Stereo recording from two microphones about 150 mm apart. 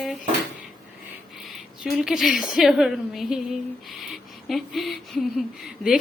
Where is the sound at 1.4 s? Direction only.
Centre (ahead or behind).